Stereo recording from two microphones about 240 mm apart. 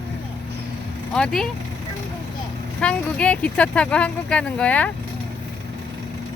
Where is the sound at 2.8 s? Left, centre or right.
Centre.